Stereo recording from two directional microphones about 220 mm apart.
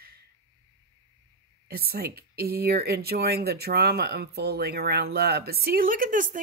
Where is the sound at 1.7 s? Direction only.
45° right (ahead or behind).